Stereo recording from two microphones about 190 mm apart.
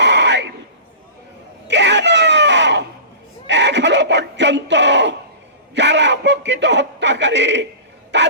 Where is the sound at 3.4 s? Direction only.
65° right (ahead or behind).